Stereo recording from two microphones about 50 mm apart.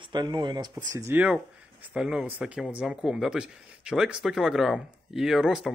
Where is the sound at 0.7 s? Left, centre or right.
Right.